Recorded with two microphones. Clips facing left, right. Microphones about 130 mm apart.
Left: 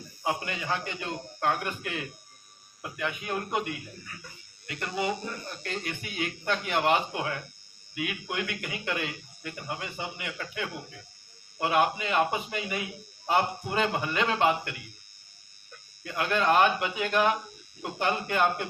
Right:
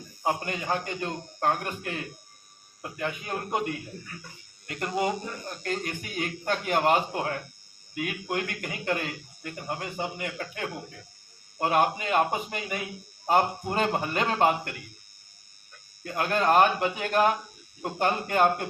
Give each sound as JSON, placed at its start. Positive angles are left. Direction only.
{"t": 0.2, "sound": "a man's voice", "side_deg": -45}
{"t": 4.6, "sound": "a man's voice", "side_deg": -45}
{"t": 16.0, "sound": "a man's voice", "side_deg": -40}